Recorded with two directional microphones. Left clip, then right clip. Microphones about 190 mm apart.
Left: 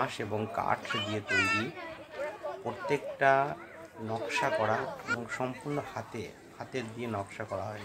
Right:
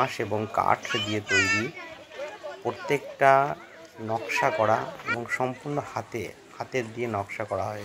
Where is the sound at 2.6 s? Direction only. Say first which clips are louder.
Right 6 dB; 20° right (ahead or behind).